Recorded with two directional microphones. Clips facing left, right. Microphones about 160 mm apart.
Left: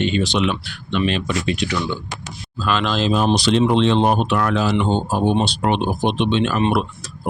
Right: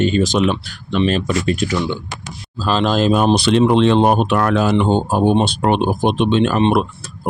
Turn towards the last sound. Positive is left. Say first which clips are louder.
# right 4 dB
turn(degrees=-45)  # may be behind; listen again after turning